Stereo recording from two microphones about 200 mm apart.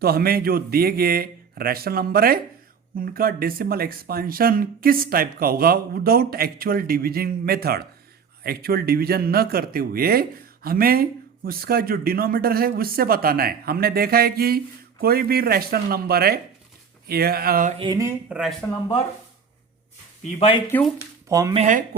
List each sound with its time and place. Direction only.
0.0 s speech: 50° right (ahead or behind)
17.7 s speech: 20° right (ahead or behind)
18.3 s speech: 5° right (ahead or behind)
20.7 s speech: 10° left (ahead or behind)
21.2 s speech: 15° right (ahead or behind)
21.5 s speech: 35° right (ahead or behind)